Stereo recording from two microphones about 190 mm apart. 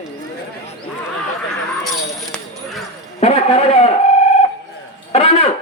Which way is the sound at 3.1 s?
30° left (ahead or behind).